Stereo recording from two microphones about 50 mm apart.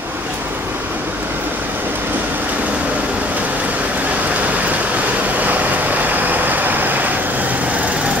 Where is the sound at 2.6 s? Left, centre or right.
Right.